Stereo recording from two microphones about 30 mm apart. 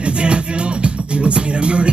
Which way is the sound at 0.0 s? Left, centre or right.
Right.